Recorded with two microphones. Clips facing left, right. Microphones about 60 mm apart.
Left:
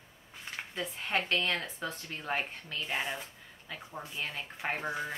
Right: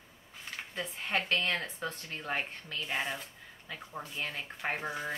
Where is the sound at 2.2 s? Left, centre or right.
Centre.